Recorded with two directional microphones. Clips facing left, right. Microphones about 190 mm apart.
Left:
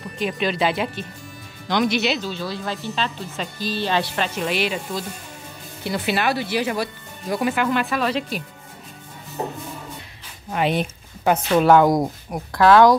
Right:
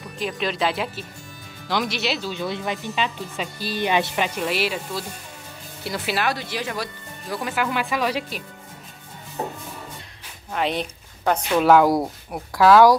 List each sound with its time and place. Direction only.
0.2 s speech: centre (ahead or behind)
2.2 s speech: 20° right (ahead or behind)
10.5 s a woman's voice: 5° left (ahead or behind)
11.6 s speech: 5° right (ahead or behind)